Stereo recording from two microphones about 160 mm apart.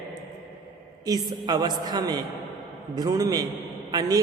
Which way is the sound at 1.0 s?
25° right (ahead or behind).